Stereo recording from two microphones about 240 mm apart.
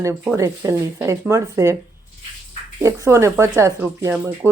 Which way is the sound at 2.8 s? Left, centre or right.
Centre.